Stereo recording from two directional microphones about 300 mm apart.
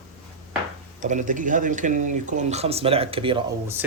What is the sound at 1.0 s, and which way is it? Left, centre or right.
Speech, right.